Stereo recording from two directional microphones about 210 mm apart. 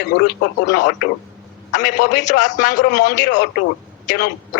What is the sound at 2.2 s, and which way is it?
Speech, 35° left (ahead or behind).